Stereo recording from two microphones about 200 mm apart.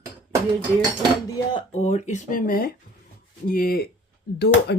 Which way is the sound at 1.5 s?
35° left (ahead or behind).